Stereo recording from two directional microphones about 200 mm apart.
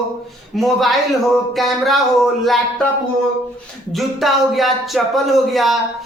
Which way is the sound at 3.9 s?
Centre (ahead or behind).